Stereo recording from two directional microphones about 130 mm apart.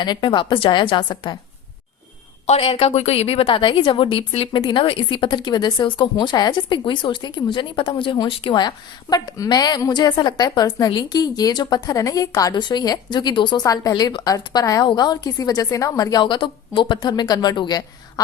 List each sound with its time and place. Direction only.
0.0 s a woman's voice: 35° left (ahead or behind)
2.5 s a woman's voice: 45° left (ahead or behind)